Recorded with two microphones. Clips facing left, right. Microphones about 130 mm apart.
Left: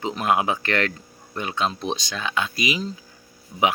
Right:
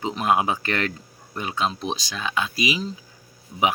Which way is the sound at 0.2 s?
20° right (ahead or behind).